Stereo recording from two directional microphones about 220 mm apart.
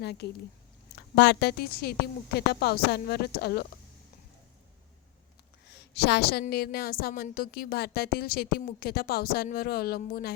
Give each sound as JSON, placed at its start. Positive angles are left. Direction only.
{"t": 0.0, "sound": "a woman's voice", "side_deg": 50}
{"t": 5.6, "sound": "a sound", "side_deg": 50}
{"t": 6.4, "sound": "a woman's voice", "side_deg": 45}